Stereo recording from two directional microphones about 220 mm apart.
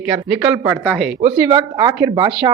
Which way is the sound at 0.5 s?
5° right (ahead or behind).